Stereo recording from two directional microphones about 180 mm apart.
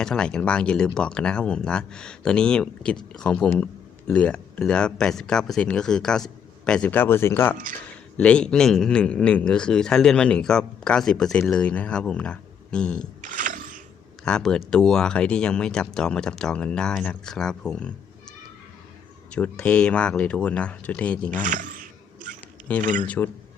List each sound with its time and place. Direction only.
0.0 s speech: 5° left (ahead or behind)
13.2 s a sound: 45° right (ahead or behind)
14.3 s speech: 5° left (ahead or behind)
19.3 s speech: 5° left (ahead or behind)
21.4 s a sound: 45° right (ahead or behind)
22.8 s speech: 45° right (ahead or behind)
23.0 s speech: 10° left (ahead or behind)